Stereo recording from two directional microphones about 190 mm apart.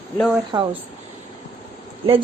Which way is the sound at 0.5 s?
20° right (ahead or behind).